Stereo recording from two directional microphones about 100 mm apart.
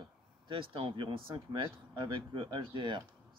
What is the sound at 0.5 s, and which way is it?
Speech, 65° right (ahead or behind).